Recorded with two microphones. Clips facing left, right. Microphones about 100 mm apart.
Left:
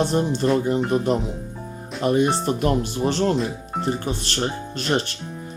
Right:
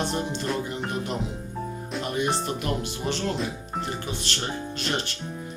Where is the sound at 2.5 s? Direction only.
40° left (ahead or behind).